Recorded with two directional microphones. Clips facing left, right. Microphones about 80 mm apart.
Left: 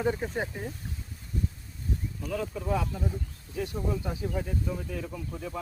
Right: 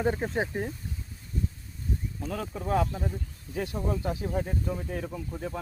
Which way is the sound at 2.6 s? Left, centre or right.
Right.